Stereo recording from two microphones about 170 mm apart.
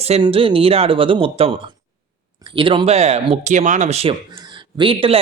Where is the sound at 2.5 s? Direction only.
30° right (ahead or behind).